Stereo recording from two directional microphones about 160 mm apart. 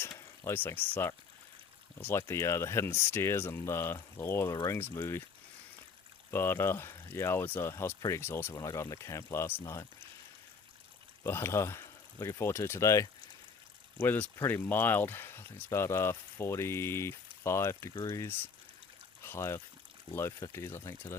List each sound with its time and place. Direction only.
0.0 s a sound: 15° left (ahead or behind)
2.0 s speech: 15° left (ahead or behind)
6.3 s speech: 15° left (ahead or behind)
11.2 s speech: 15° left (ahead or behind)